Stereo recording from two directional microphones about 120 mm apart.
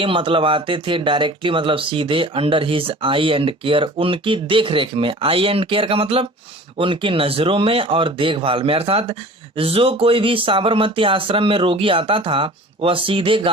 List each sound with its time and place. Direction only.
0.0 s speech: 45° right (ahead or behind)